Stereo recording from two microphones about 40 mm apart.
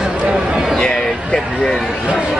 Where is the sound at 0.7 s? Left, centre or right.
Centre.